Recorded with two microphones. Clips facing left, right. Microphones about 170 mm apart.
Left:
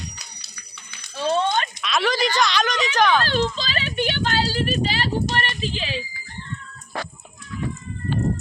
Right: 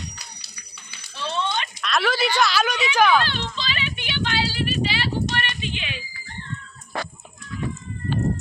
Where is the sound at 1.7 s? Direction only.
Centre (ahead or behind).